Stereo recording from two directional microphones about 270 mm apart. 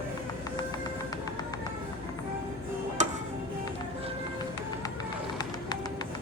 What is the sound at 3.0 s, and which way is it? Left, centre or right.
Music, right.